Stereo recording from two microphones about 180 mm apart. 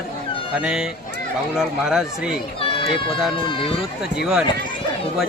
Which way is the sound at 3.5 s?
30° left (ahead or behind).